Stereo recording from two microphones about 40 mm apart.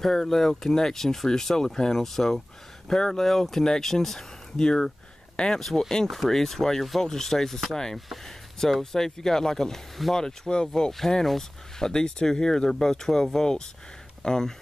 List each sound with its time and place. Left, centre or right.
0.0 s speech: centre
10.7 s speech: centre